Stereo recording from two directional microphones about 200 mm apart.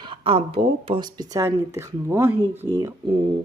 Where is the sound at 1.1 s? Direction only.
15° right (ahead or behind).